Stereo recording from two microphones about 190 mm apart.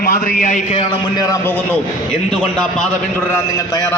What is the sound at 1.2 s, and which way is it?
Speech, 10° left (ahead or behind).